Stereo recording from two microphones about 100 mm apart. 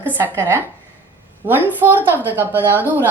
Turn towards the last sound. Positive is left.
turn(degrees=-20)  # may be behind; listen again after turning